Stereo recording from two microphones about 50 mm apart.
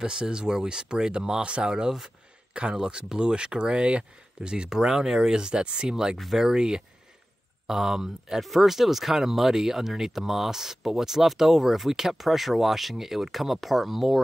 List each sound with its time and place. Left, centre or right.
0.0 s speech: centre
6.1 s speech: centre